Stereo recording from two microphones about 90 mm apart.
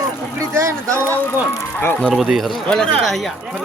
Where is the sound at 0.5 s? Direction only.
35° right (ahead or behind).